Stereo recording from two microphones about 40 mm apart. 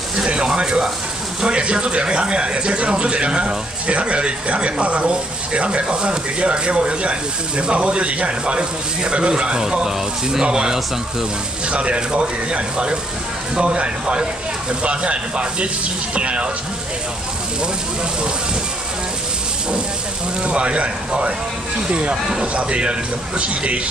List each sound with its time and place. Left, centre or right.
0.2 s speech: right
11.7 s speech: right
20.5 s speech: right